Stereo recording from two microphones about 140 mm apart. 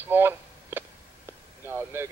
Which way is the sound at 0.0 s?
15° right (ahead or behind).